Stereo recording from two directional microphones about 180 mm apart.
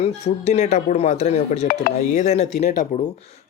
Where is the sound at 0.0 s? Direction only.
40° left (ahead or behind).